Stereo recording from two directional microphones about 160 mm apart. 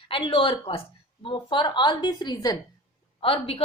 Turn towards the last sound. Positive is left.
turn(degrees=35)  # may be behind; listen again after turning